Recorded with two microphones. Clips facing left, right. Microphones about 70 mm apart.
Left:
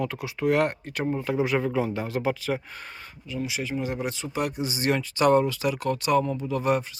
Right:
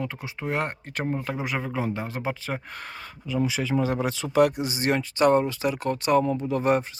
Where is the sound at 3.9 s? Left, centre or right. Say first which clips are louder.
Right 4 dB; right.